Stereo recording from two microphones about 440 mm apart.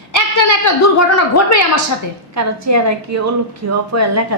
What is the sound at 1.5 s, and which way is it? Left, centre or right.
Speech, left.